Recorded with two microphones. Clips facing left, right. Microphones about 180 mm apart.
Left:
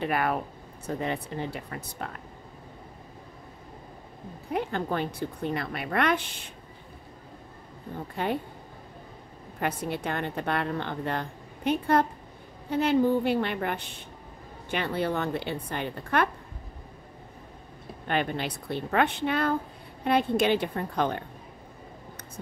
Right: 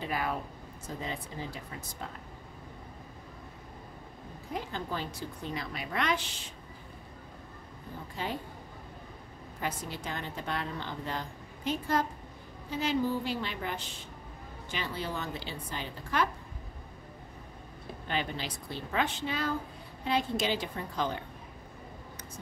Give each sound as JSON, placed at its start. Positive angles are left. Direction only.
{"t": 0.0, "sound": "a woman's voice", "side_deg": 65}
{"t": 4.5, "sound": "a woman's voice", "side_deg": 60}
{"t": 8.2, "sound": "a woman's voice", "side_deg": 60}
{"t": 9.6, "sound": "a woman's voice", "side_deg": 60}
{"t": 18.0, "sound": "a woman's voice", "side_deg": 55}